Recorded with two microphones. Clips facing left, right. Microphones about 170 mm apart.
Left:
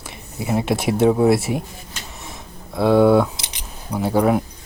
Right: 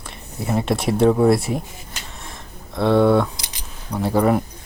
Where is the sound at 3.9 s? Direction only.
Centre (ahead or behind).